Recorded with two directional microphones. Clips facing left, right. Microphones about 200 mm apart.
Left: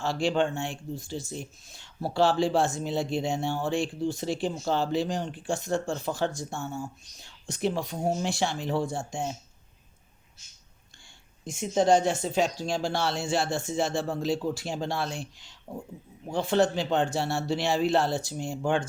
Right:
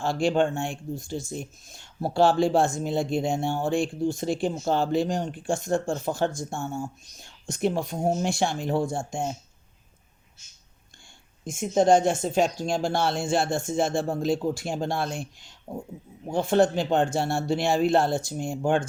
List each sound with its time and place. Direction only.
0.0 s speech: 50° right (ahead or behind)
11.4 s speech: 50° right (ahead or behind)